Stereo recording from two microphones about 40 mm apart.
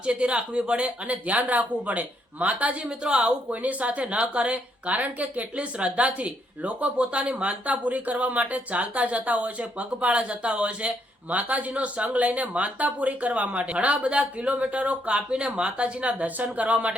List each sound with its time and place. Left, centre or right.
0.0 s a woman's voice: right
3.0 s speech: right
3.5 s a woman's voice: right
11.3 s a woman's voice: right